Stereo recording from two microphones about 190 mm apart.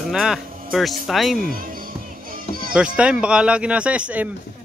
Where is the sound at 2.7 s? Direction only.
5° right (ahead or behind).